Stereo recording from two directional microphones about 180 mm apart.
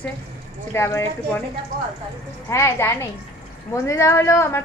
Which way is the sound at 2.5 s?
15° left (ahead or behind).